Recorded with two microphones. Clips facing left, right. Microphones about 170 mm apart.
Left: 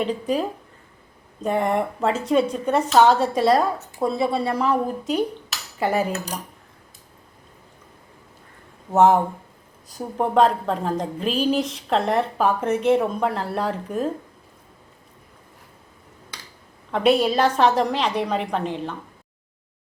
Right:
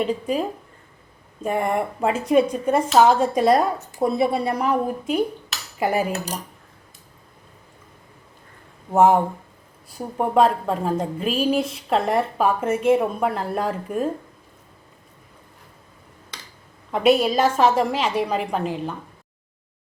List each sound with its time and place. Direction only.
0.0 s a woman's voice: 5° right (ahead or behind)
9.0 s a woman's voice: 5° right (ahead or behind)
16.9 s a woman's voice: 5° right (ahead or behind)